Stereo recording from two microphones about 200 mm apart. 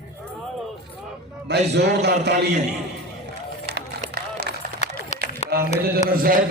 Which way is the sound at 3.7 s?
55° right (ahead or behind).